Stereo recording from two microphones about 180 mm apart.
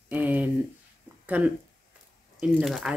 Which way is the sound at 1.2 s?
10° right (ahead or behind).